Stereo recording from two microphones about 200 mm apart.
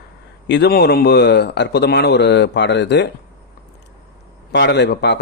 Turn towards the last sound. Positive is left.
turn(degrees=55)  # may be behind; listen again after turning